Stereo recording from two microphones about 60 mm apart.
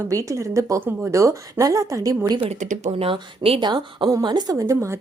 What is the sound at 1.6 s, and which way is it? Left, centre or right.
Speech, right.